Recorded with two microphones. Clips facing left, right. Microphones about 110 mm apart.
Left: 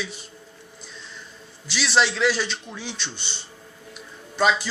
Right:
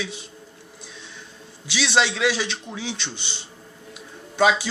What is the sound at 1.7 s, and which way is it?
A man's voice, 65° right (ahead or behind).